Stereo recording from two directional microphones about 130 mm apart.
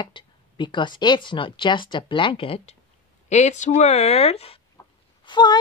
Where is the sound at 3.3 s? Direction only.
65° left (ahead or behind).